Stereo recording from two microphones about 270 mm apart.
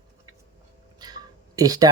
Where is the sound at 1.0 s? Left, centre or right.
Centre.